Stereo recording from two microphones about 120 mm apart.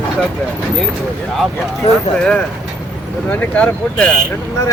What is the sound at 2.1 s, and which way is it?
Speech, 5° left (ahead or behind).